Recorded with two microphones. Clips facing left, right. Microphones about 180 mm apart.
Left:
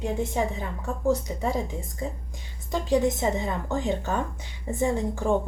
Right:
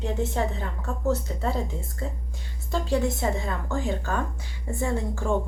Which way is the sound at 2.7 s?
15° left (ahead or behind).